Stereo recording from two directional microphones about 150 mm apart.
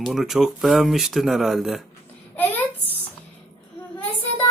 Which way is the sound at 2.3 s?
10° left (ahead or behind).